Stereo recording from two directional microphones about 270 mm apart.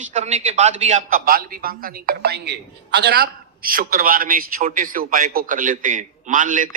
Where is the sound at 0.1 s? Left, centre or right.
Right.